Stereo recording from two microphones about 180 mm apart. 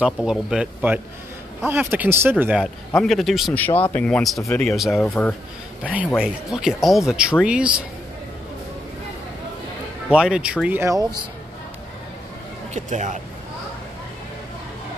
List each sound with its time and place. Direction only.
0.0 s speech: 5° right (ahead or behind)
3.1 s speech: centre (ahead or behind)
5.9 s speech: 10° right (ahead or behind)
10.0 s speech: 5° right (ahead or behind)
12.7 s speech: 40° right (ahead or behind)